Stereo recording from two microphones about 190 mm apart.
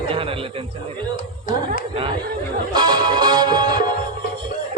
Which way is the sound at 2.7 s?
20° right (ahead or behind).